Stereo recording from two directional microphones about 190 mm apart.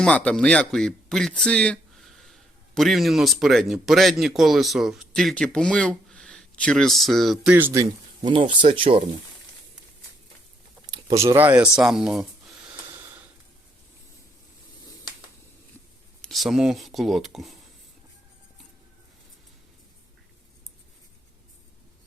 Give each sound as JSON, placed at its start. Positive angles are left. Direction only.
{"t": 0.3, "sound": "a man's voice", "side_deg": 5}
{"t": 7.5, "sound": "speech", "side_deg": -15}
{"t": 8.3, "sound": "speech", "side_deg": -30}
{"t": 10.8, "sound": "speech", "side_deg": -20}
{"t": 12.9, "sound": "a sound", "side_deg": -10}
{"t": 16.2, "sound": "speech", "side_deg": 0}